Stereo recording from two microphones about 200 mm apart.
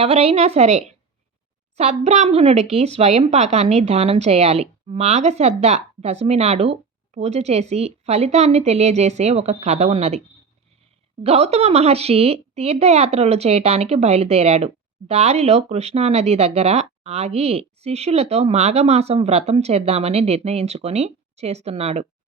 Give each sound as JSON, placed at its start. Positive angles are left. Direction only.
{"t": 0.0, "sound": "a woman's voice", "side_deg": -30}
{"t": 11.2, "sound": "a woman's voice", "side_deg": -30}